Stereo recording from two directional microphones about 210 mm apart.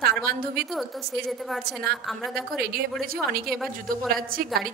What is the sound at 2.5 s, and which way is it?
Speech, 45° right (ahead or behind).